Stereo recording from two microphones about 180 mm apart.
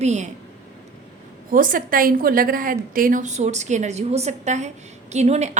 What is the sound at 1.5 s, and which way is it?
A woman's voice, 50° right (ahead or behind).